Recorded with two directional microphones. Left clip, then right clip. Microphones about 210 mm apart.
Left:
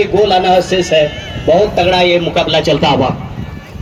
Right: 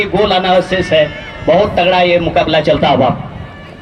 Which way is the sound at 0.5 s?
30° left (ahead or behind).